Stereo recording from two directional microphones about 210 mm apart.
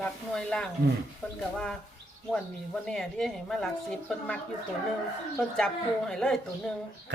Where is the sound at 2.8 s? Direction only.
Centre (ahead or behind).